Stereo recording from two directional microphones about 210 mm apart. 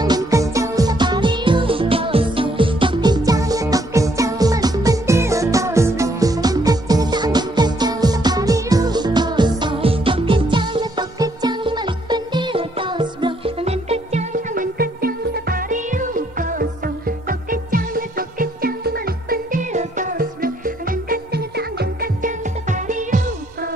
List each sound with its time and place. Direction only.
0.0 s music: 15° right (ahead or behind); by 23.7 s 40° right (ahead or behind)